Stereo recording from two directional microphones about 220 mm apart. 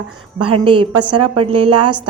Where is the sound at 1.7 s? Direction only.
90° right.